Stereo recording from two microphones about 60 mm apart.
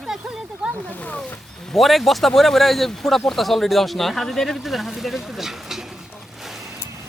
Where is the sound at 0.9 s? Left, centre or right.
Left.